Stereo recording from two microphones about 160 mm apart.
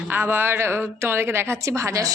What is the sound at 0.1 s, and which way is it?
A woman's voice, 15° right (ahead or behind).